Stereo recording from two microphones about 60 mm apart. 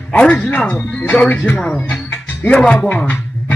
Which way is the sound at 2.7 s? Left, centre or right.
Left.